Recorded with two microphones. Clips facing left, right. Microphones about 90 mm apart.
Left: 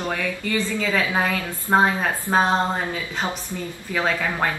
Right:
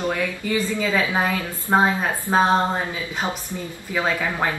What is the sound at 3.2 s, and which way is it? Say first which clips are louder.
Speech: even; 10° right (ahead or behind).